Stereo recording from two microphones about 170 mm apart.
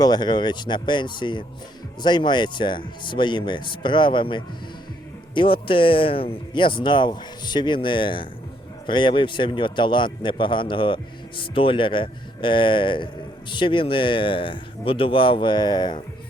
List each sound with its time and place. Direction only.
0.0 s a man's voice: 25° left (ahead or behind)